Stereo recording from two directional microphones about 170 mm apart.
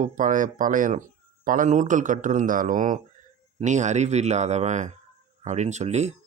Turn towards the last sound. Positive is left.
turn(degrees=-40)  # may be behind; listen again after turning